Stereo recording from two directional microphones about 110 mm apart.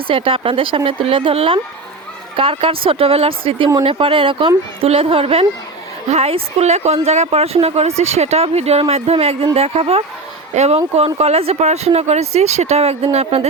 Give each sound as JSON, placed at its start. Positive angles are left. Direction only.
{"t": 0.1, "sound": "speech", "side_deg": -55}
{"t": 6.1, "sound": "speech", "side_deg": -70}
{"t": 10.5, "sound": "speech", "side_deg": -80}